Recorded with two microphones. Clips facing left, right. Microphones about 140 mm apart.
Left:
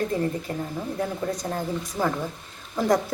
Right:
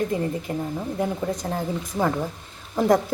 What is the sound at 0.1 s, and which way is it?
A woman's voice, 15° right (ahead or behind).